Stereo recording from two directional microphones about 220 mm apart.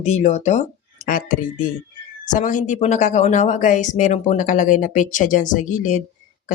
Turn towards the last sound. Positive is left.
turn(degrees=35)  # may be behind; listen again after turning